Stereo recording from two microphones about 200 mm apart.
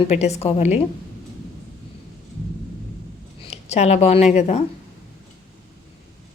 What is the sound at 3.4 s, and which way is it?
Speech, 30° left (ahead or behind).